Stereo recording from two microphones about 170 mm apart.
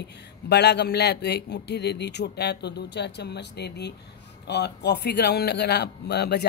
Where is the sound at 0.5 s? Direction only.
75° left (ahead or behind).